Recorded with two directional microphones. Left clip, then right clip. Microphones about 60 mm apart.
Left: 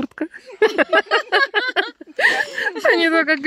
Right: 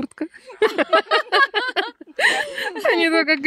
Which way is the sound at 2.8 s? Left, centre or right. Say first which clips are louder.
Left 2 dB; centre.